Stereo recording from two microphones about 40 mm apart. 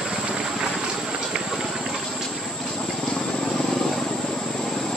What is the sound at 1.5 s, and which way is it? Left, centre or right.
Run, centre.